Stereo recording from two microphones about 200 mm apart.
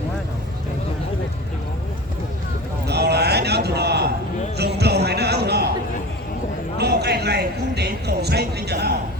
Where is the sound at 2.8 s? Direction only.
55° right (ahead or behind).